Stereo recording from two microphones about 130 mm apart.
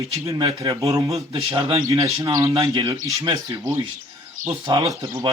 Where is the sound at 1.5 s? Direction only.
40° right (ahead or behind).